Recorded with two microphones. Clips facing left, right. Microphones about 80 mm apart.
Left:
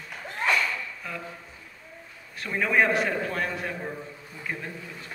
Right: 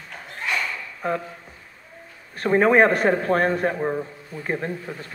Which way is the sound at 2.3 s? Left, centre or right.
Right.